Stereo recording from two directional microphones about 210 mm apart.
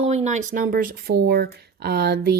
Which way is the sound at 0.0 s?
30° right (ahead or behind).